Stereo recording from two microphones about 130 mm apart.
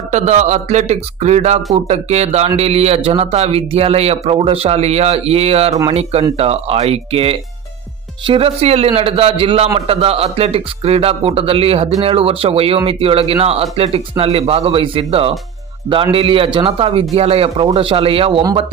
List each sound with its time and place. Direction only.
0.1 s a man's voice: 60° right (ahead or behind); by 18.4 s 45° right (ahead or behind)